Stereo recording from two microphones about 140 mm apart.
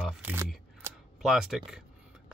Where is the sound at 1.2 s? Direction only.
5° right (ahead or behind).